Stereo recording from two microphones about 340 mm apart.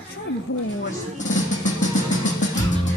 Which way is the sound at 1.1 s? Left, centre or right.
Left.